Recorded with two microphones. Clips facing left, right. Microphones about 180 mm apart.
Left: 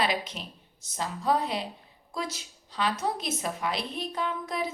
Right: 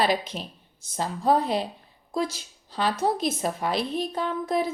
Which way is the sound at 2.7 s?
35° right (ahead or behind).